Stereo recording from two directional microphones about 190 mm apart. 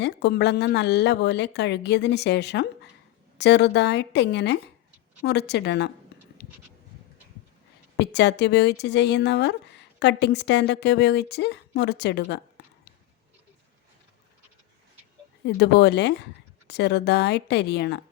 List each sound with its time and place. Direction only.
0.0 s speech: 60° left (ahead or behind)
7.9 s speech: 65° left (ahead or behind)
15.4 s speech: 60° left (ahead or behind)